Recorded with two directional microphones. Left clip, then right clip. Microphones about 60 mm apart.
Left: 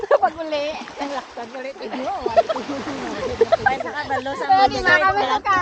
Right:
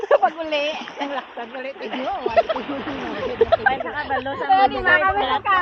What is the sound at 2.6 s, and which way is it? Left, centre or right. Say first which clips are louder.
Speech: even; left.